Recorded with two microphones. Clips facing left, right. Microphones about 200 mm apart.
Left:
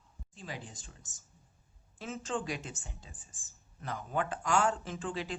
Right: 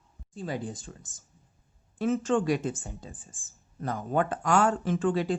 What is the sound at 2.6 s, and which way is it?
Speech, 45° right (ahead or behind).